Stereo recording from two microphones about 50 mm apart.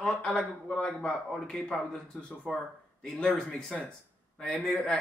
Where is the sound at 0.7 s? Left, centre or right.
Left.